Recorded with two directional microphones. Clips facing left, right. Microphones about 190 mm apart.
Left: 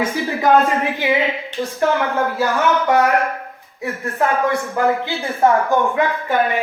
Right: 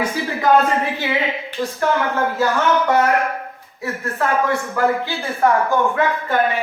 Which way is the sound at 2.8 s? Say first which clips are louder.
Left 1 dB; 15° left (ahead or behind).